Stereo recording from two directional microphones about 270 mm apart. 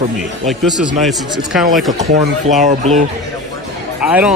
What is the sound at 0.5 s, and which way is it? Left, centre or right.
Speech, centre.